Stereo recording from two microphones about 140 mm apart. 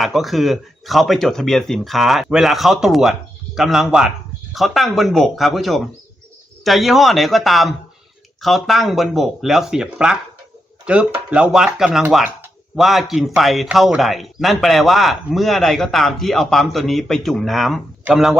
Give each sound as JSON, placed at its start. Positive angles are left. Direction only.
{"t": 0.0, "sound": "a man's voice", "side_deg": 0}